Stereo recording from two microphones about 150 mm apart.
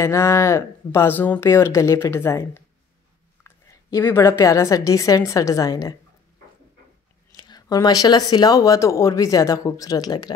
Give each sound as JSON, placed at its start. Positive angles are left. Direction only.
{"t": 0.0, "sound": "a woman's voice", "side_deg": 20}
{"t": 7.3, "sound": "speech", "side_deg": 30}